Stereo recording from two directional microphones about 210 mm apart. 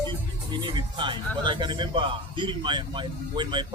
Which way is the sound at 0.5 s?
20° right (ahead or behind).